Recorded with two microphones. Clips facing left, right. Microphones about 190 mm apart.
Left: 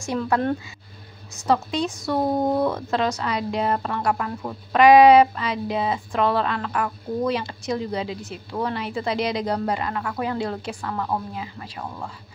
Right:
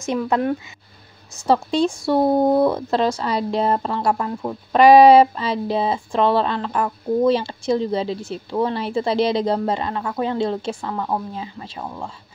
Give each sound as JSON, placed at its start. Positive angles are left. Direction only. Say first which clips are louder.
{"t": 0.0, "sound": "a woman's voice", "louder": "right 2 dB", "side_deg": -20}
{"t": 1.5, "sound": "a woman's voice", "louder": "right 4 dB", "side_deg": -30}